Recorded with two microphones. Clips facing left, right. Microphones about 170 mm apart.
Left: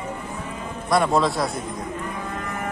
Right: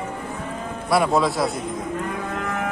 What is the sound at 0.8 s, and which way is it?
Speech, 5° right (ahead or behind).